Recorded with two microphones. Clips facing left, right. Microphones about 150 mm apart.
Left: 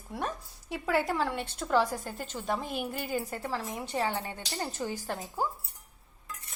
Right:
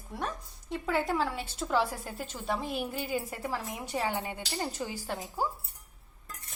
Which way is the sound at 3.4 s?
10° right (ahead or behind).